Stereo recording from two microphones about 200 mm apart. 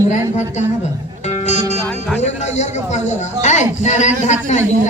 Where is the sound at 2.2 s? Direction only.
35° left (ahead or behind).